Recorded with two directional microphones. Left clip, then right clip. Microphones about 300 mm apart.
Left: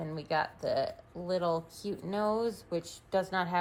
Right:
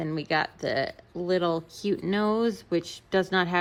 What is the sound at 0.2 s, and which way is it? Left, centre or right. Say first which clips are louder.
Speech: right 4 dB; right.